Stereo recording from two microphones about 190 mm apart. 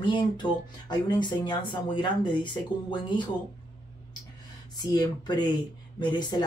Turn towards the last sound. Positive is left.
turn(degrees=20)  # may be behind; listen again after turning